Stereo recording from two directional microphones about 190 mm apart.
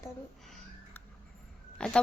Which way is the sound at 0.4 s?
Centre (ahead or behind).